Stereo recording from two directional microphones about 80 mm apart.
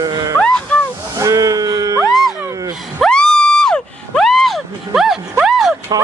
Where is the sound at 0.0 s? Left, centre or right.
Right.